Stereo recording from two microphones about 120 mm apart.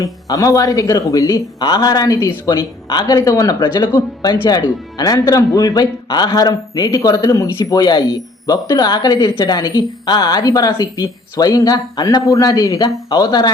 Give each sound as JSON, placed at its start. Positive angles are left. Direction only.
{"t": 0.0, "sound": "speech", "side_deg": 30}